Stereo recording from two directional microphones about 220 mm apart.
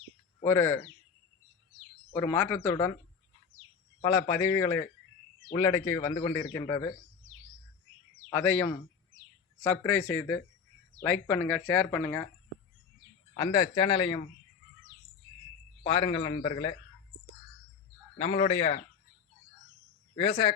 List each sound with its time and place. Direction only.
0.4 s a man's voice: 10° left (ahead or behind)
2.1 s a man's voice: 10° left (ahead or behind)
4.3 s a man's voice: 15° left (ahead or behind)
8.3 s a man's voice: 10° left (ahead or behind)
9.8 s a man's voice: 10° left (ahead or behind)
13.3 s a man's voice: 20° left (ahead or behind)
15.8 s a man's voice: 25° left (ahead or behind)
18.2 s a man's voice: 30° left (ahead or behind)
20.1 s a man's voice: 25° left (ahead or behind)